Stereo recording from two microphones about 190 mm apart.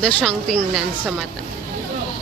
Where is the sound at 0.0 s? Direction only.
5° left (ahead or behind).